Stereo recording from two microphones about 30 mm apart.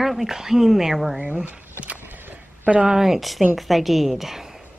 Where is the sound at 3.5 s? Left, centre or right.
Centre.